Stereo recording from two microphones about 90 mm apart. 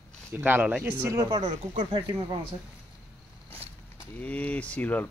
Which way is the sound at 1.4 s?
60° right (ahead or behind).